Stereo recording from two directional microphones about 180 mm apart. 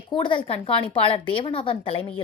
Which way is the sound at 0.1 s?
25° left (ahead or behind).